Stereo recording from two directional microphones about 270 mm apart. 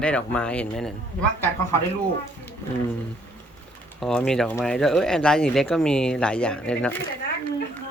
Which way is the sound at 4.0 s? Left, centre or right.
Centre.